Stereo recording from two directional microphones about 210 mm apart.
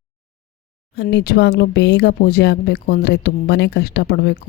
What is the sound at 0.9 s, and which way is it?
Speech, 50° left (ahead or behind).